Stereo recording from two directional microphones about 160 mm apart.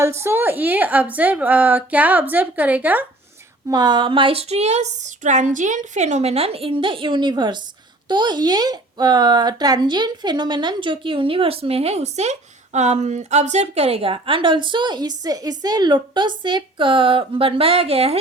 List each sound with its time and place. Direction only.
0.0 s a woman's voice: 15° right (ahead or behind)
3.7 s speech: 25° right (ahead or behind)